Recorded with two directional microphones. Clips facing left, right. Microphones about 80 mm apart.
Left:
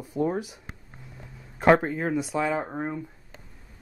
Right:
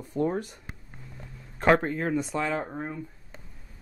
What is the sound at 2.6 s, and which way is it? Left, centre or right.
Speech, centre.